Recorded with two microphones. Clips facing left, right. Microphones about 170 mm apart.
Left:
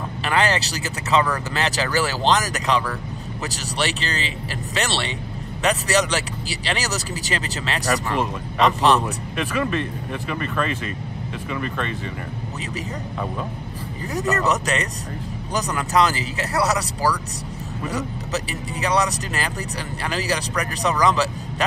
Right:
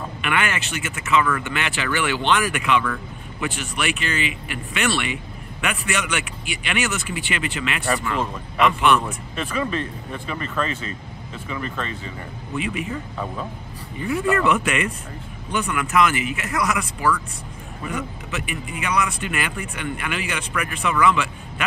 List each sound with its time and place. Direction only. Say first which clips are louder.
0.2 s speech: left 3 dB; 35° left (ahead or behind)
12.5 s speech: right 7 dB; 40° left (ahead or behind)
14.0 s speech: right 2 dB; 40° left (ahead or behind)